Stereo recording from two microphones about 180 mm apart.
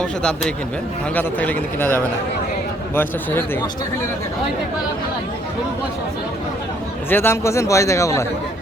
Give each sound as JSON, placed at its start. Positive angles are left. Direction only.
{"t": 0.0, "sound": "a man's voice", "side_deg": 5}
{"t": 7.1, "sound": "a man's voice", "side_deg": 10}